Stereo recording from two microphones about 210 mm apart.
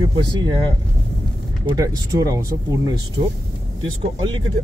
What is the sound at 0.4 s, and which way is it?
Speech, 20° right (ahead or behind).